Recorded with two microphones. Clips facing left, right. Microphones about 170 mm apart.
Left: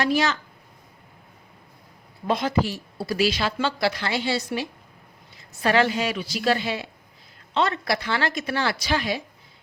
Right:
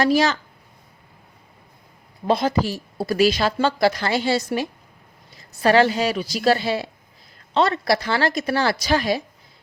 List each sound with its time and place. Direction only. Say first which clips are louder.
0.0 s a woman's voice: right 4 dB; 35° right (ahead or behind)
2.2 s a woman's voice: right 3 dB; 35° right (ahead or behind)